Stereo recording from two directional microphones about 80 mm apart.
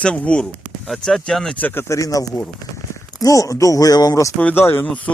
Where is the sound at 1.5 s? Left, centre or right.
Left.